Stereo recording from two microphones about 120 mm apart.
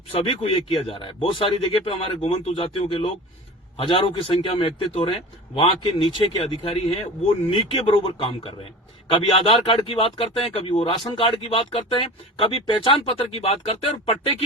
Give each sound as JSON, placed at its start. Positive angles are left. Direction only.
{"t": 0.1, "sound": "speech", "side_deg": 50}